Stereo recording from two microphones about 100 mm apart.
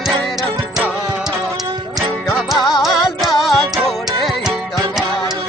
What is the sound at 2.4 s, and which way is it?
Music, centre (ahead or behind).